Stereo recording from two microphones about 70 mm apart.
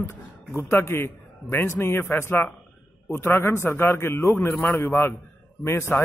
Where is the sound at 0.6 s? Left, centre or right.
Left.